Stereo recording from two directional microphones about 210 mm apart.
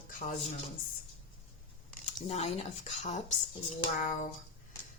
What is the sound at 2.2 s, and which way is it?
A woman's voice, 30° left (ahead or behind).